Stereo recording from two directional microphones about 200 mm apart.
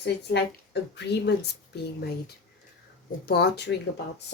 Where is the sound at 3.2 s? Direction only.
55° left (ahead or behind).